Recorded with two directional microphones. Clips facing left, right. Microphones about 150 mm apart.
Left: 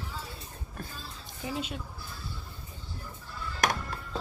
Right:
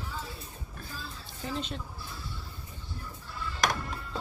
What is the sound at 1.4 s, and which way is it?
Speech, 10° left (ahead or behind).